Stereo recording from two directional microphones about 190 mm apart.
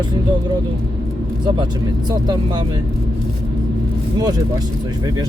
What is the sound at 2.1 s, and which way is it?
Speech, 20° right (ahead or behind).